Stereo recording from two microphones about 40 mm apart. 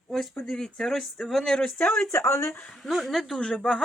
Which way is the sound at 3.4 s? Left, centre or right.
Centre.